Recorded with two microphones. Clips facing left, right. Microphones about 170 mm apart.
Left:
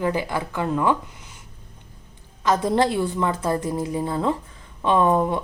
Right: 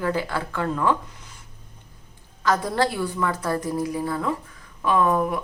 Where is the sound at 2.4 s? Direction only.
20° left (ahead or behind).